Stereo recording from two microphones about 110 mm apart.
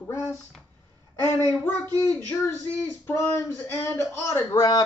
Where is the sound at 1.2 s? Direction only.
30° right (ahead or behind).